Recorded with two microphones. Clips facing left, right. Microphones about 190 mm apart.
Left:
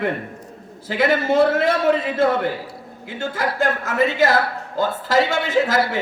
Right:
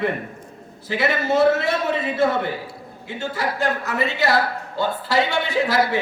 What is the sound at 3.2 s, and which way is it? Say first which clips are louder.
A man's voice: left 2 dB; 50° left (ahead or behind).